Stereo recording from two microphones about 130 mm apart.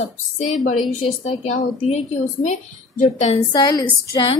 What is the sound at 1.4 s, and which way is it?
A woman's voice, 60° left (ahead or behind).